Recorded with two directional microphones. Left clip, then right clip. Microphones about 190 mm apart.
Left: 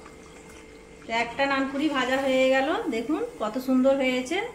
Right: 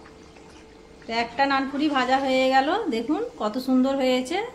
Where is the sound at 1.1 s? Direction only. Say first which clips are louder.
Right 2 dB; 60° right (ahead or behind).